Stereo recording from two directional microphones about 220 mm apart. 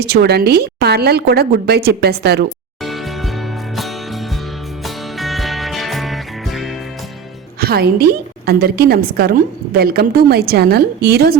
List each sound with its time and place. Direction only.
0.0 s a woman's voice: 45° right (ahead or behind)
2.8 s music: centre (ahead or behind)
7.6 s a woman's voice: 45° right (ahead or behind)